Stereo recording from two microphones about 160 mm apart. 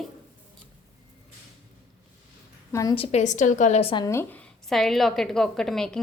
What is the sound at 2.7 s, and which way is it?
Speech, 20° left (ahead or behind).